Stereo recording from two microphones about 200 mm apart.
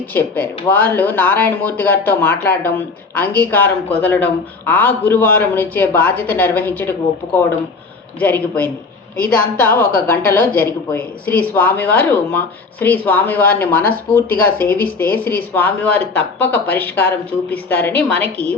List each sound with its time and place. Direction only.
0.0 s speech: 10° left (ahead or behind)
8.2 s speech: 10° left (ahead or behind)